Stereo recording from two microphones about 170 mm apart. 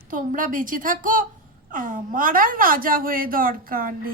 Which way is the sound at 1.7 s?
55° right (ahead or behind).